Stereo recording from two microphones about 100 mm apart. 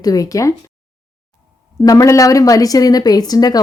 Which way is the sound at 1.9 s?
35° left (ahead or behind).